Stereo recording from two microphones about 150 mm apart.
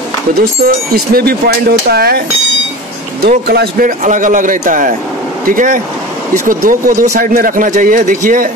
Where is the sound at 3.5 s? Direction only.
80° right.